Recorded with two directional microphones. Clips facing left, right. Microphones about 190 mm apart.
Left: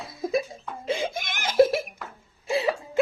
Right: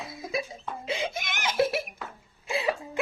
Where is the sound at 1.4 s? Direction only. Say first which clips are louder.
Left 7 dB; 45° left (ahead or behind).